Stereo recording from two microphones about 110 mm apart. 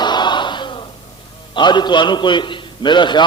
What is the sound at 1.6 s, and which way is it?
A man's voice, 45° left (ahead or behind).